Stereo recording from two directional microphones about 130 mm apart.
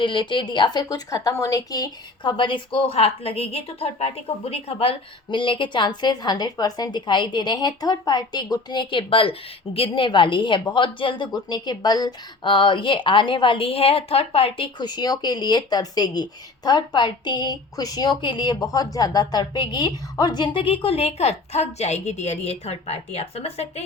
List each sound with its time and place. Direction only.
0.0 s a woman's voice: 40° left (ahead or behind)